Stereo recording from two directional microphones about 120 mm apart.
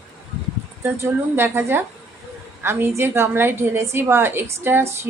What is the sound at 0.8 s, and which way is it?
A woman's voice, 20° right (ahead or behind).